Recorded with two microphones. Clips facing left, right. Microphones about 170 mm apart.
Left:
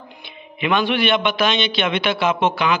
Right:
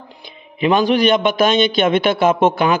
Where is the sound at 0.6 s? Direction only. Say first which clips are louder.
Right 5 dB; 40° right (ahead or behind).